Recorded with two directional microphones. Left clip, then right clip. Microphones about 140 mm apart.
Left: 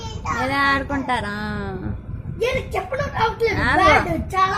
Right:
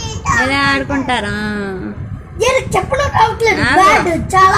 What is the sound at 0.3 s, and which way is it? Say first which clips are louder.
Speech: right 6 dB; 5° left (ahead or behind).